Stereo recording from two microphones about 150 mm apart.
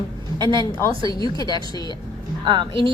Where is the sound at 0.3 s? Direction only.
30° right (ahead or behind).